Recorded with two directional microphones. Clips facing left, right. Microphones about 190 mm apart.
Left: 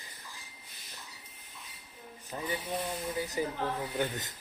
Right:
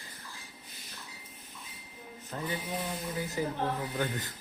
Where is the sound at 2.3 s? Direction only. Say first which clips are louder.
Even; 15° left (ahead or behind).